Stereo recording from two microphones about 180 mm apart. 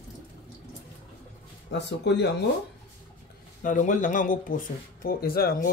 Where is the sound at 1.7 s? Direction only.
75° left (ahead or behind).